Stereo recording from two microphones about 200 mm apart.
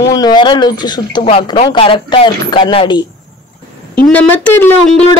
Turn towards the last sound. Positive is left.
turn(degrees=5)  # may be behind; listen again after turning